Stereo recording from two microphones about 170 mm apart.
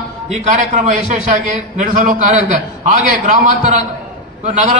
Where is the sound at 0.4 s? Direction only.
45° right (ahead or behind).